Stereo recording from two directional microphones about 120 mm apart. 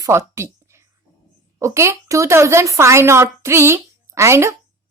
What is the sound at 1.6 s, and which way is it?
A woman's voice, 25° right (ahead or behind).